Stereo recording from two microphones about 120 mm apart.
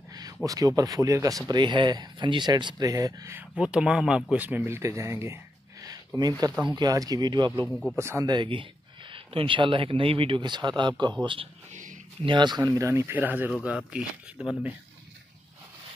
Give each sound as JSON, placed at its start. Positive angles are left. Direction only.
{"t": 0.1, "sound": "speech", "side_deg": -30}
{"t": 1.5, "sound": "speech", "side_deg": -40}
{"t": 3.3, "sound": "speech", "side_deg": -10}
{"t": 7.6, "sound": "speech", "side_deg": 0}
{"t": 7.9, "sound": "speech", "side_deg": -20}
{"t": 8.3, "sound": "speech", "side_deg": -45}
{"t": 12.3, "sound": "speech", "side_deg": -40}